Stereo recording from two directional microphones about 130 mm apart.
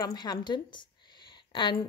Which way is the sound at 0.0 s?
30° left (ahead or behind).